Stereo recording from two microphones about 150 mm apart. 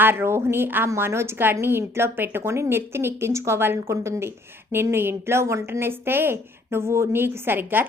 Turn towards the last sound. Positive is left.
turn(degrees=-15)  # may be behind; listen again after turning